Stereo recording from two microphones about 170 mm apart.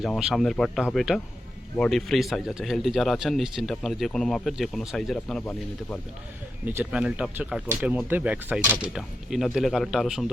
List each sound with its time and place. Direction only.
0.0 s speech: centre (ahead or behind)
6.7 s speech: 10° right (ahead or behind)